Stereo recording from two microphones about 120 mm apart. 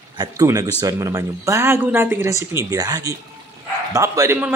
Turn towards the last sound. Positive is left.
turn(degrees=-25)  # may be behind; listen again after turning